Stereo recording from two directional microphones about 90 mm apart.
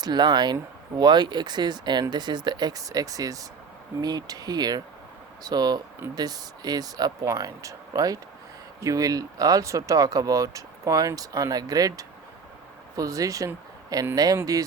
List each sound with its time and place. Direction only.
0.0 s speech: 55° right (ahead or behind)